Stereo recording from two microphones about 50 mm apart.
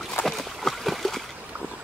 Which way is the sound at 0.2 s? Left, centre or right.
Centre.